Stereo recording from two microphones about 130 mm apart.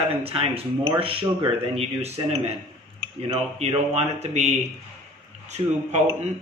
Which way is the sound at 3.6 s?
55° right (ahead or behind).